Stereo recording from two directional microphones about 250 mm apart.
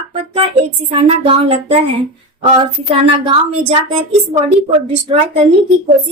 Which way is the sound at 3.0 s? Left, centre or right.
Right.